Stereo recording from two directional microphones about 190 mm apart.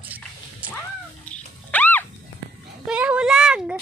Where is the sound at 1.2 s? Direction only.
10° left (ahead or behind).